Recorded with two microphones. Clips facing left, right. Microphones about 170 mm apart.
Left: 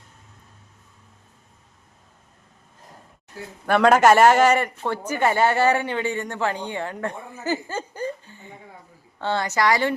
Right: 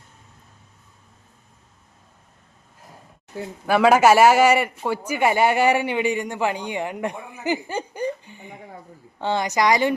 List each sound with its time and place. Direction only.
3.7 s a man's voice: 5° right (ahead or behind)